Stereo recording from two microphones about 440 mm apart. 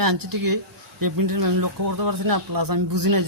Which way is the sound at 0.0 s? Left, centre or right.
Right.